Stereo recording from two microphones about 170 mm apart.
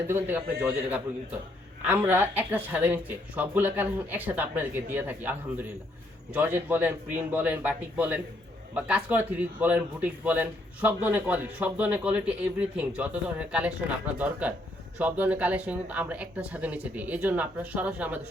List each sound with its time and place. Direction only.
0.1 s a man's voice: 10° right (ahead or behind)